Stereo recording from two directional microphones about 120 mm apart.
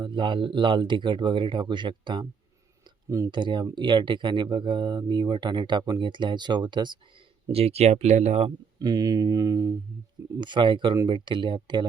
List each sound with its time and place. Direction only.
0.0 s speech: 40° right (ahead or behind)
3.1 s speech: 25° right (ahead or behind)
3.3 s speech: 40° right (ahead or behind)
7.5 s speech: 60° right (ahead or behind)
8.8 s speech: 35° right (ahead or behind)